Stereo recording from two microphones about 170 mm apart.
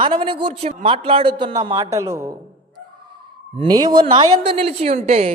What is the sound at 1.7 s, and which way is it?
Speech, 20° right (ahead or behind).